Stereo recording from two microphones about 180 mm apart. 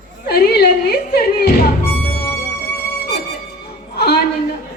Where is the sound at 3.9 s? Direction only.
65° left (ahead or behind).